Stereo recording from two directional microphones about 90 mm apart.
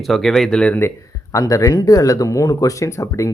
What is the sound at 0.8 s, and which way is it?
Speech, 35° left (ahead or behind).